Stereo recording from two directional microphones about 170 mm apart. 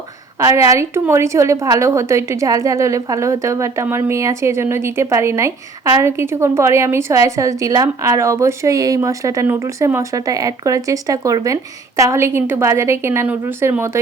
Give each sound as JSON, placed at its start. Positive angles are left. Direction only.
{"t": 0.3, "sound": "a woman's voice", "side_deg": -20}